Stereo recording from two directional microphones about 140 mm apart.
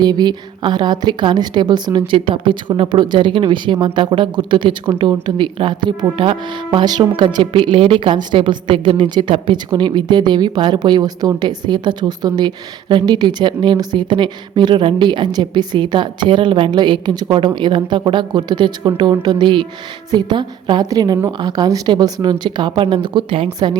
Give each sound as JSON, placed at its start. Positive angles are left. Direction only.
{"t": 0.0, "sound": "speech", "side_deg": -30}